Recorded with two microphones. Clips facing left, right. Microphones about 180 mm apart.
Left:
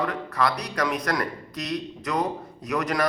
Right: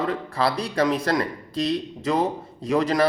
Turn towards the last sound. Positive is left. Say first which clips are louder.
# right 5 dB
turn(degrees=-25)  # may be behind; listen again after turning